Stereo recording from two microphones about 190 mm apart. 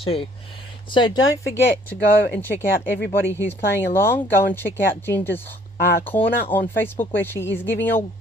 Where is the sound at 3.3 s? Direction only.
10° left (ahead or behind).